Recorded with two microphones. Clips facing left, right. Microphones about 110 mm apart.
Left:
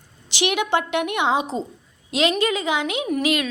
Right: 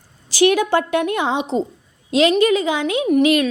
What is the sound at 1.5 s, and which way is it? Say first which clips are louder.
Speech: right 7 dB; 20° right (ahead or behind).